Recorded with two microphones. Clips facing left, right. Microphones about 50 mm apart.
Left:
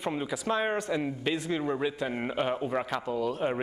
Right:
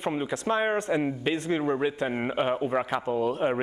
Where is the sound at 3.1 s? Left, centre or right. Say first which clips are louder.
Right 4 dB; right.